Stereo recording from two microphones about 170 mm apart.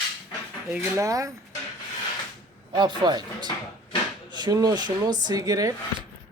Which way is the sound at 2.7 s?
25° right (ahead or behind).